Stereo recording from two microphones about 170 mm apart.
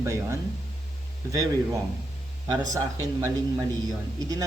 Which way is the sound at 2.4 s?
25° right (ahead or behind).